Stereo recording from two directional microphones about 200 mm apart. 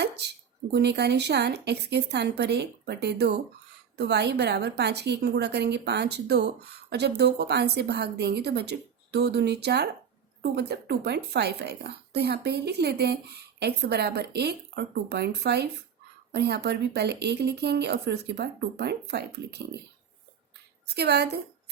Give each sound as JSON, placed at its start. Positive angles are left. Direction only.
{"t": 0.0, "sound": "a woman's voice", "side_deg": -55}
{"t": 20.8, "sound": "a woman's voice", "side_deg": -55}